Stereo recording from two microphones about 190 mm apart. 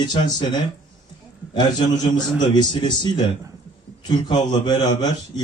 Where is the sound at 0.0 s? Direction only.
25° left (ahead or behind).